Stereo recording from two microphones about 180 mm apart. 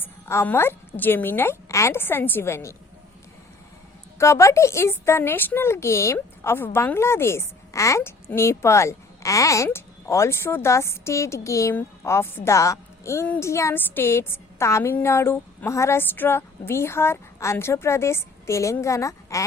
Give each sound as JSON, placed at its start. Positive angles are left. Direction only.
{"t": 0.0, "sound": "a woman's voice", "side_deg": 15}
{"t": 4.2, "sound": "a woman's voice", "side_deg": 15}